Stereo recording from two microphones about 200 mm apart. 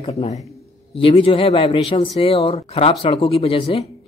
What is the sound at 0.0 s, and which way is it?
A man's voice, 30° left (ahead or behind).